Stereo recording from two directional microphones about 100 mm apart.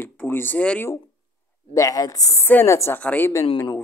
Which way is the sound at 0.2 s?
20° left (ahead or behind).